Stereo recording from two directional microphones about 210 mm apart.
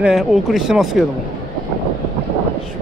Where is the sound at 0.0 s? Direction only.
Centre (ahead or behind).